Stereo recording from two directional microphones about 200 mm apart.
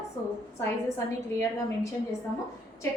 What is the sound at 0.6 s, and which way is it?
A woman's voice, 15° left (ahead or behind).